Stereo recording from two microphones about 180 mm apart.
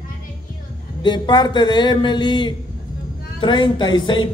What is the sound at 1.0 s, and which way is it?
A man's voice, 25° left (ahead or behind).